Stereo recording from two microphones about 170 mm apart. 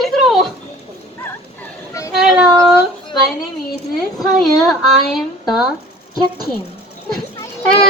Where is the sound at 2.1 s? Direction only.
Centre (ahead or behind).